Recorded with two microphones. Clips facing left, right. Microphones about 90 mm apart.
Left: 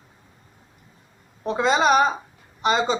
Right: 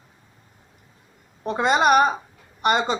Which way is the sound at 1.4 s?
55° right (ahead or behind).